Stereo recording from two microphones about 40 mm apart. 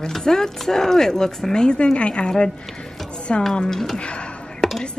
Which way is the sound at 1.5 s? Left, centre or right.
Left.